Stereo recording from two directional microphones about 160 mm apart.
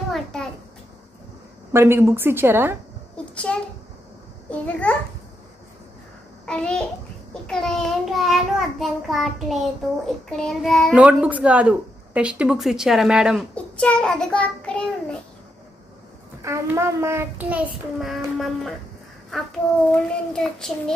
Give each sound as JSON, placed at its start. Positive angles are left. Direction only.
{"t": 0.1, "sound": "a sound", "side_deg": 5}
{"t": 1.7, "sound": "speech", "side_deg": -15}
{"t": 3.5, "sound": "child singing", "side_deg": 5}
{"t": 6.4, "sound": "a child's voice", "side_deg": 5}
{"t": 7.4, "sound": "child singing", "side_deg": 5}
{"t": 11.0, "sound": "speech", "side_deg": -10}
{"t": 13.6, "sound": "child singing", "side_deg": 5}
{"t": 16.4, "sound": "speech", "side_deg": -15}
{"t": 19.9, "sound": "child singing", "side_deg": 5}